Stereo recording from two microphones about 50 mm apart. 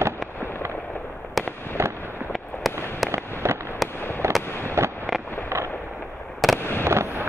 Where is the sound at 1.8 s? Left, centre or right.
Right.